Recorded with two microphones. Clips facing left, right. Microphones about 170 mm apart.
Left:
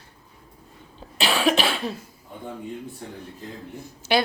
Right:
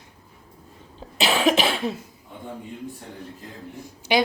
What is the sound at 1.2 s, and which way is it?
Cough, 20° right (ahead or behind).